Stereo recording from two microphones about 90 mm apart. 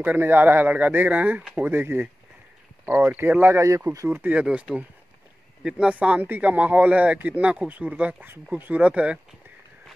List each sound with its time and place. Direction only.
0.0 s a man's voice: 20° right (ahead or behind)
3.6 s speech: 35° right (ahead or behind)
4.2 s speech: 15° right (ahead or behind)